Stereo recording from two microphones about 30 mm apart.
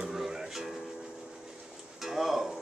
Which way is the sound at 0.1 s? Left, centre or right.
Centre.